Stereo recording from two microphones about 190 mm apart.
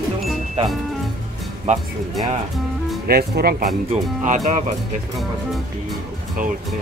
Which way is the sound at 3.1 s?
55° right (ahead or behind).